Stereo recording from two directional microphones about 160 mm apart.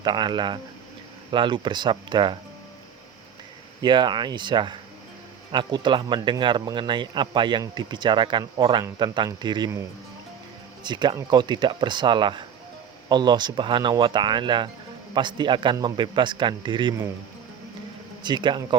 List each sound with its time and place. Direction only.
0.0 s speech: 30° right (ahead or behind)
3.8 s speech: 30° right (ahead or behind)
10.8 s speech: 30° right (ahead or behind)
18.2 s speech: 30° right (ahead or behind)